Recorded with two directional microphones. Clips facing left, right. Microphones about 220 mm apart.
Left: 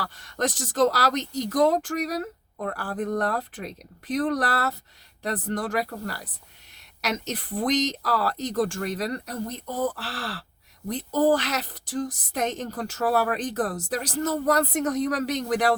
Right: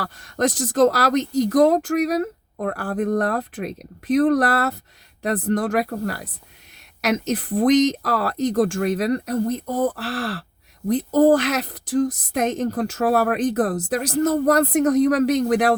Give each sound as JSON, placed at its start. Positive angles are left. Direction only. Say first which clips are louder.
{"t": 0.6, "sound": "speech", "louder": "right 5 dB", "side_deg": -55}